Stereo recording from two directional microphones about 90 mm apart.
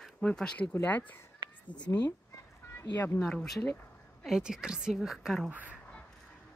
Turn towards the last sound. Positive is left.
turn(degrees=-20)  # may be behind; listen again after turning